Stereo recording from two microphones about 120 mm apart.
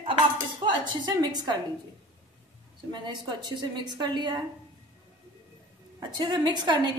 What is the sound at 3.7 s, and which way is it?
Speech, 35° right (ahead or behind).